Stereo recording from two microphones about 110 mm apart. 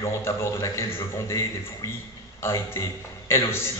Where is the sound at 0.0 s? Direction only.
25° left (ahead or behind).